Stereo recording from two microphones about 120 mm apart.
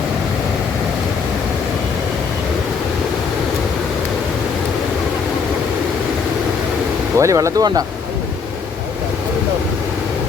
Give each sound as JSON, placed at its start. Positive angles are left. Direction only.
{"t": 7.2, "sound": "speech", "side_deg": -25}